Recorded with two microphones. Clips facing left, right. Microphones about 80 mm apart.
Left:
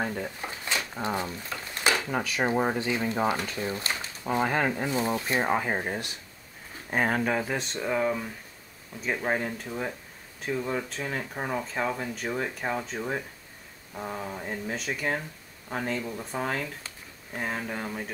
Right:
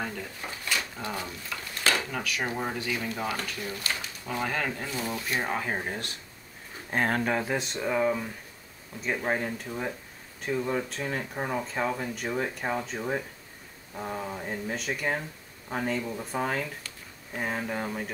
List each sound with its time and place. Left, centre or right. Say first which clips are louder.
0.0 s speech: left 4 dB; left; by 18.1 s centre